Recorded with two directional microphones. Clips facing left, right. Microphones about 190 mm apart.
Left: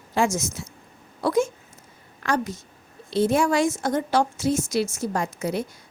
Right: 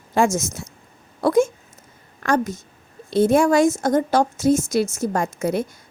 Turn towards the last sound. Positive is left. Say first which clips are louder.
# right 4 dB
turn(degrees=-50)  # may be behind; listen again after turning